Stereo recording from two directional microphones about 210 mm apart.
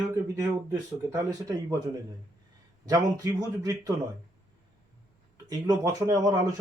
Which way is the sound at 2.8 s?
15° right (ahead or behind).